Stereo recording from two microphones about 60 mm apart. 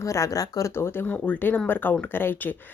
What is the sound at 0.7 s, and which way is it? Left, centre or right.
Speech, left.